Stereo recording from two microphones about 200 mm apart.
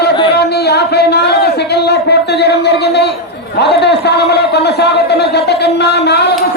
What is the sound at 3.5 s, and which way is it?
A man's voice, 55° left (ahead or behind).